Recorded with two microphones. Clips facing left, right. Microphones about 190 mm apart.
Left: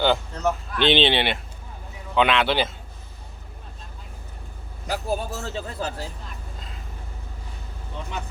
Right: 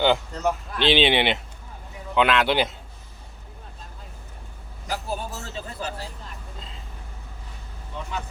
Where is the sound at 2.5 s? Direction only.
15° right (ahead or behind).